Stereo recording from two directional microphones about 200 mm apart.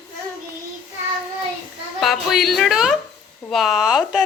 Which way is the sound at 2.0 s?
Centre (ahead or behind).